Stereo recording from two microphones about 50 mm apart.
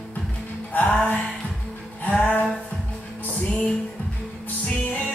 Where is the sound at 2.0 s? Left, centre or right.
Left.